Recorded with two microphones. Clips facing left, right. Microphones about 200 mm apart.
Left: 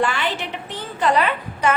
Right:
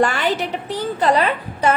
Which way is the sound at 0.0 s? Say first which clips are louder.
Right 4 dB; 40° right (ahead or behind).